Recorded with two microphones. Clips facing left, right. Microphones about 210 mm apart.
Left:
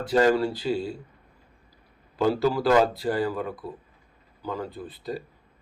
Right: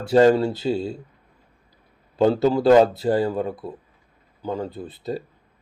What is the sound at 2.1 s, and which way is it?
Speech, 25° right (ahead or behind).